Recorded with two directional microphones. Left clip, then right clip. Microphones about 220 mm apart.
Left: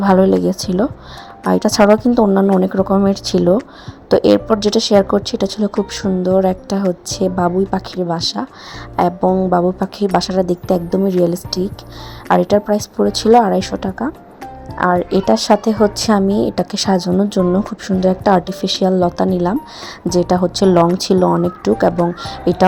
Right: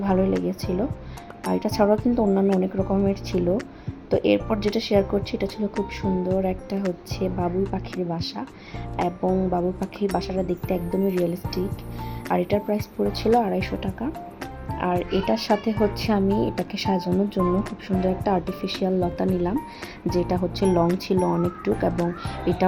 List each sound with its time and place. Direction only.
0.0 s a woman's voice: 35° left (ahead or behind)